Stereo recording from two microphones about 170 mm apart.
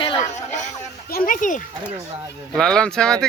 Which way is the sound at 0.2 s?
45° left (ahead or behind).